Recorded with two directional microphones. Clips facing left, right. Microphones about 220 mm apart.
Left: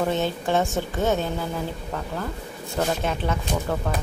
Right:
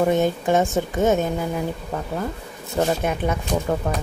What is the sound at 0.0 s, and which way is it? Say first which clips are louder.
A woman's voice: right 5 dB; 15° right (ahead or behind).